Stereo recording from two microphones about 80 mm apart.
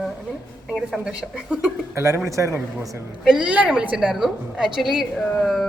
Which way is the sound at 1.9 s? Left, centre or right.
Right.